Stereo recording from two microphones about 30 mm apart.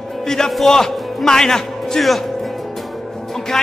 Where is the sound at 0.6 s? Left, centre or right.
Centre.